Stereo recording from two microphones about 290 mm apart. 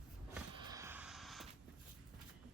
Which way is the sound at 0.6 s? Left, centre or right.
Centre.